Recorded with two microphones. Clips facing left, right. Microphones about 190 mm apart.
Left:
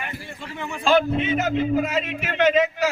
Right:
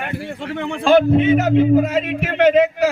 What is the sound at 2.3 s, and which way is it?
Speech, 55° right (ahead or behind).